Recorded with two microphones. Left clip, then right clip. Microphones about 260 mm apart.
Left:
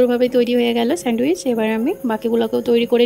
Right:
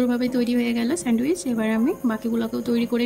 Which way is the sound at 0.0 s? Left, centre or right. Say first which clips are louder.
Left 9 dB; centre.